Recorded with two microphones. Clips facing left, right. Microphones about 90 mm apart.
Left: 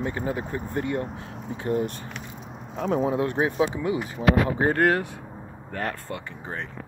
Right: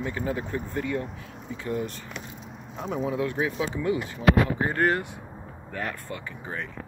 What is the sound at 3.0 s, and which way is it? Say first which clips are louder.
Speech: left 2 dB; 40° left (ahead or behind).